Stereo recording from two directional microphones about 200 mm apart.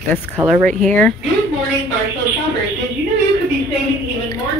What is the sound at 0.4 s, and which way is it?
Speech, 10° right (ahead or behind).